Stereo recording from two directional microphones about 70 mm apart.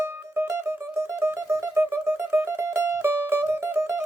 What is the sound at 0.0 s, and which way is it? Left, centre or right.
Mandolin, right.